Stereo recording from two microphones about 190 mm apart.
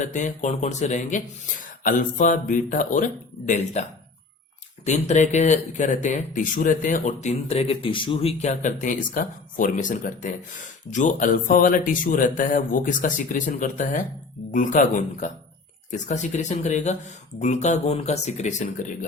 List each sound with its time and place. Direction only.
0.0 s speech: 40° left (ahead or behind)
4.9 s speech: 40° left (ahead or behind)